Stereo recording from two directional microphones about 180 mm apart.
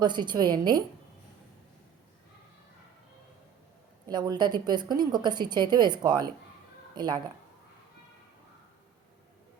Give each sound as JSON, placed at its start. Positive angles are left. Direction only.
{"t": 0.0, "sound": "a woman's voice", "side_deg": -25}
{"t": 4.1, "sound": "a woman's voice", "side_deg": -25}